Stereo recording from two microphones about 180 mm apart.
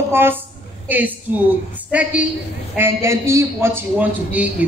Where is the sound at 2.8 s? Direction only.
15° right (ahead or behind).